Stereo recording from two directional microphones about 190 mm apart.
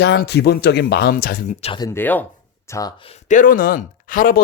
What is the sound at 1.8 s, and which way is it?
Speech, 10° left (ahead or behind).